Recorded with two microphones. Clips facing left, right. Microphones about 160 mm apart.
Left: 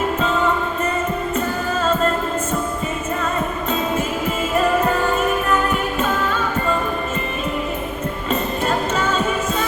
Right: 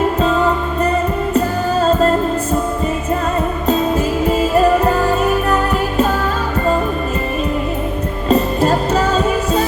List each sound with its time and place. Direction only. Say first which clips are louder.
1.3 s music: right 6 dB; 35° right (ahead or behind)
4.4 s music: right 5 dB; 35° right (ahead or behind)
8.3 s music: right 8 dB; 35° right (ahead or behind)